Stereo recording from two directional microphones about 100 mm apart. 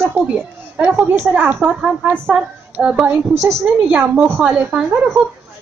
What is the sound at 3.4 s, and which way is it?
Speech, 25° right (ahead or behind).